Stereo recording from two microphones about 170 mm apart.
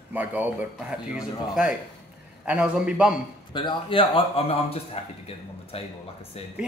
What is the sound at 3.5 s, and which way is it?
A man's voice, 30° left (ahead or behind).